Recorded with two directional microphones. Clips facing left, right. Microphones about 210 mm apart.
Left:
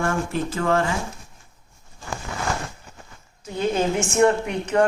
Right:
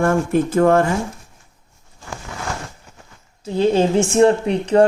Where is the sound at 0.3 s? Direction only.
50° right (ahead or behind).